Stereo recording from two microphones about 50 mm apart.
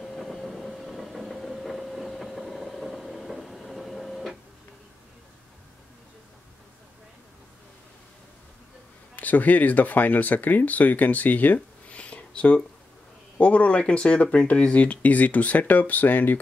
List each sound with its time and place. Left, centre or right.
0.0 s train: centre
9.1 s speech: left